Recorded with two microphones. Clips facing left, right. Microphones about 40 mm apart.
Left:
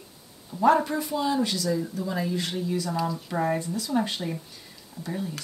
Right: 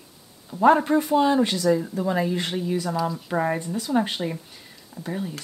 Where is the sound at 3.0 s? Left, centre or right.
Centre.